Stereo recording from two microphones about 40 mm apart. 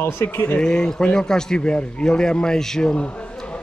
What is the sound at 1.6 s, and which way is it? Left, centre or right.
A man's voice, left.